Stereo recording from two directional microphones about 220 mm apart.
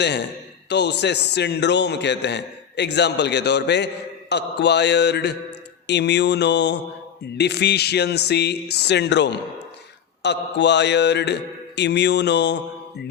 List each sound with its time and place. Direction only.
0.7 s a man's voice: 50° left (ahead or behind)